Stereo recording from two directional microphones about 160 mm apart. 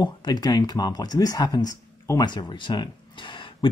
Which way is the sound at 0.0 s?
25° left (ahead or behind).